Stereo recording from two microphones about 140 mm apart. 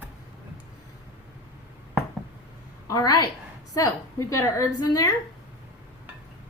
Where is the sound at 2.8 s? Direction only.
30° left (ahead or behind).